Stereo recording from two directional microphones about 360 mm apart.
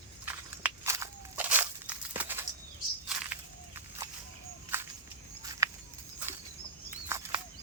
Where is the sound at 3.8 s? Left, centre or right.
Centre.